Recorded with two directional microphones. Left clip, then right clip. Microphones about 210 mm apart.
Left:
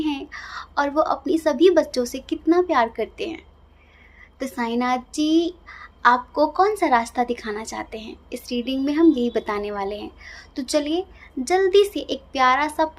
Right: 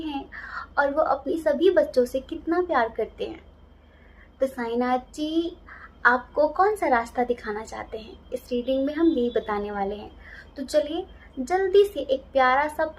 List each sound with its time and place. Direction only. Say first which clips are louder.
0.0 s a woman's voice: left 6 dB; 50° left (ahead or behind)